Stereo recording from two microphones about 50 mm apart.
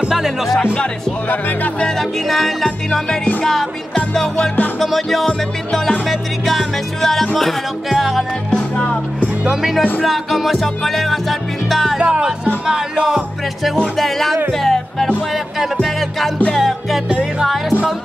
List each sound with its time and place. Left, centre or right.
0.1 s music: centre
2.0 s music: centre
4.7 s music: centre
8.5 s music: centre
9.4 s speech: centre
10.0 s music: centre
12.0 s music: centre
13.9 s music: centre
16.5 s music: centre